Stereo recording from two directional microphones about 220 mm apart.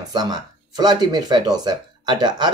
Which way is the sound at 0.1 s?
20° right (ahead or behind).